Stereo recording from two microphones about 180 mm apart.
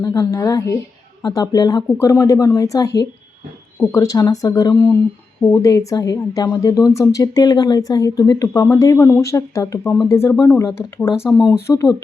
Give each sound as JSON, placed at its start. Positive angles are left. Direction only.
{"t": 0.0, "sound": "a woman's voice", "side_deg": 20}
{"t": 3.9, "sound": "a woman's voice", "side_deg": 20}
{"t": 11.1, "sound": "speech", "side_deg": -5}
{"t": 11.6, "sound": "speech", "side_deg": 15}